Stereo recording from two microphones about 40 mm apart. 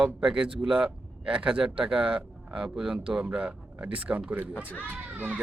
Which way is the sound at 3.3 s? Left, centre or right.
Right.